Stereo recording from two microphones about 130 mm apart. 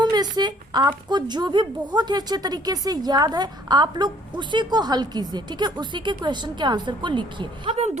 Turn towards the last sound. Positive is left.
turn(degrees=-60)  # may be behind; listen again after turning